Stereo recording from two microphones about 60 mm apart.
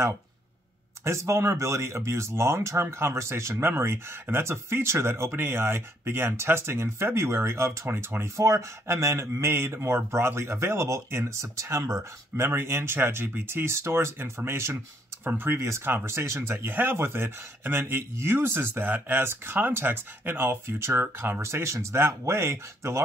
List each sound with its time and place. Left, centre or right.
1.0 s speech: right
15.5 s speech: right